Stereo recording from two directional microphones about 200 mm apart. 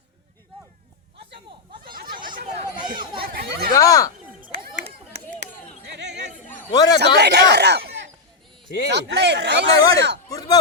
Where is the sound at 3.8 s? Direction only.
15° left (ahead or behind).